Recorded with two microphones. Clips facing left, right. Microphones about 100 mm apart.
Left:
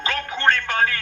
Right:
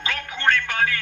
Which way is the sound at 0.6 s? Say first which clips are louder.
Left 2 dB; 40° left (ahead or behind).